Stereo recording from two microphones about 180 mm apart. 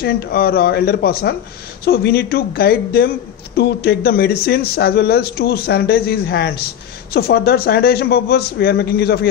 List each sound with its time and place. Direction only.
0.0 s speech: 60° left (ahead or behind)